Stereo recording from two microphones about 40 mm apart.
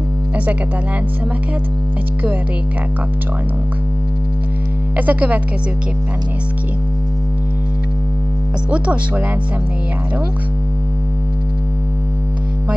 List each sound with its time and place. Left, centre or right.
4.9 s speech: right
8.6 s speech: right